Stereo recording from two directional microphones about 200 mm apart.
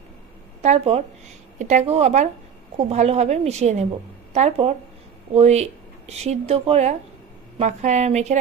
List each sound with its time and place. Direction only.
0.6 s a woman's voice: 30° right (ahead or behind)